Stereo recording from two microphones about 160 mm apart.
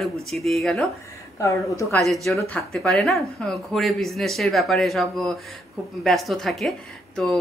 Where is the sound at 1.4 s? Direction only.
20° left (ahead or behind).